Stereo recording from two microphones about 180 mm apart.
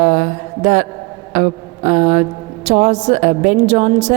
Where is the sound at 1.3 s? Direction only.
45° right (ahead or behind).